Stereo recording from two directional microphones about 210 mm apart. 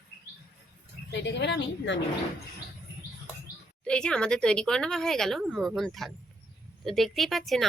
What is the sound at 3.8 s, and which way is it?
Speech, 5° left (ahead or behind).